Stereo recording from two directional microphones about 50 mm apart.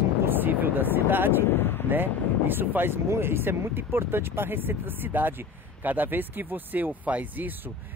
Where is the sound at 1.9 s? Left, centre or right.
Right.